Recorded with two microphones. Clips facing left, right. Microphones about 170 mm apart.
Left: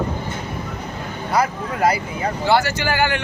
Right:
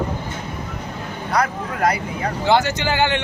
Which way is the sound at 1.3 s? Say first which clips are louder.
Left 1 dB; 5° left (ahead or behind).